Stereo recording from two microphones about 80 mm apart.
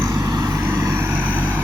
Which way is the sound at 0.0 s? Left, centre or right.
Right.